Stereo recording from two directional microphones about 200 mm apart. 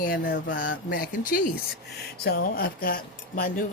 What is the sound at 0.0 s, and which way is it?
Speech, 45° left (ahead or behind).